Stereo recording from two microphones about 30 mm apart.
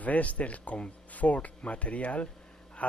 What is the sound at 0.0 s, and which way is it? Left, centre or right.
Speech, left.